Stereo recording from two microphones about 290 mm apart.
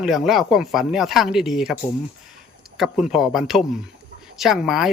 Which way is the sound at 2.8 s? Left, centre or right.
Centre.